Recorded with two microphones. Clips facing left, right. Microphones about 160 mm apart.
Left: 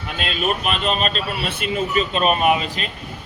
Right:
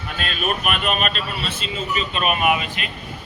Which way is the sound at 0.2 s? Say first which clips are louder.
Left 2 dB; 25° left (ahead or behind).